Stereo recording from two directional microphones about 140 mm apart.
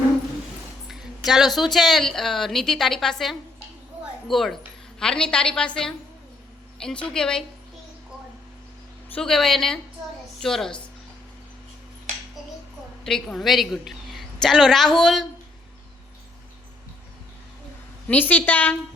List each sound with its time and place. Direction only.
0.9 s a woman's voice: centre (ahead or behind)
9.1 s a woman's voice: 5° left (ahead or behind)
13.1 s a woman's voice: 5° left (ahead or behind)
18.1 s a woman's voice: 10° left (ahead or behind)